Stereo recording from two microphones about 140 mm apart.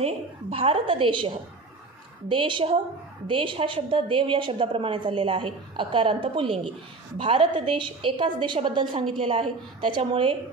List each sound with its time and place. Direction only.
0.0 s a woman's voice: 40° right (ahead or behind)